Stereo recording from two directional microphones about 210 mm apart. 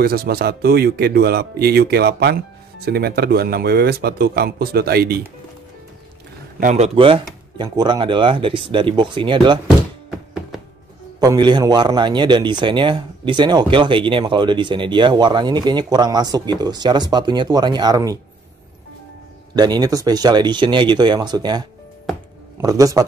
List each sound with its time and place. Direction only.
0.0 s speech: 45° right (ahead or behind)
6.6 s a man's voice: 30° right (ahead or behind)
11.1 s a man's voice: 20° right (ahead or behind)
19.5 s a man's voice: 20° right (ahead or behind)